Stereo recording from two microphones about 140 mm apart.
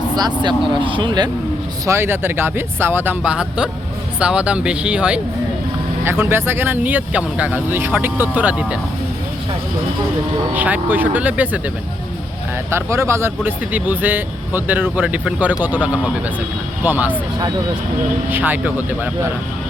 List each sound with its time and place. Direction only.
0.2 s speech: 30° right (ahead or behind)
1.9 s speech: 15° right (ahead or behind)
10.5 s speech: 10° right (ahead or behind)
12.7 s speech: 20° right (ahead or behind)
18.3 s speech: 15° right (ahead or behind)